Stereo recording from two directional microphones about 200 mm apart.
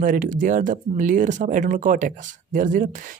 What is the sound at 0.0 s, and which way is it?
Speech, 40° right (ahead or behind).